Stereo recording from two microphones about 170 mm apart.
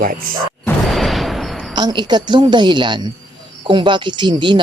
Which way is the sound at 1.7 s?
25° right (ahead or behind).